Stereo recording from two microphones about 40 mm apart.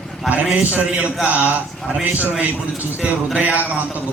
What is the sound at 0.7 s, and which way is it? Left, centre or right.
A man's voice, right.